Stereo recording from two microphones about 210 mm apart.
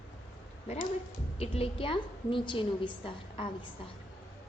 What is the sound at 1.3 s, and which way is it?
A woman's voice, 30° left (ahead or behind).